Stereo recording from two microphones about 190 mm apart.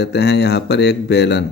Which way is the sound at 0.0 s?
65° left (ahead or behind).